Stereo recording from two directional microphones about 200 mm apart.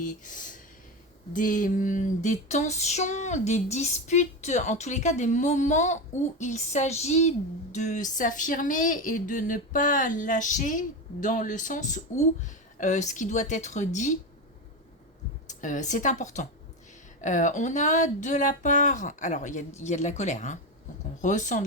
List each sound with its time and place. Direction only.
0.0 s speech: 40° left (ahead or behind)
1.3 s female singing: 40° left (ahead or behind)
15.4 s female singing: 40° left (ahead or behind)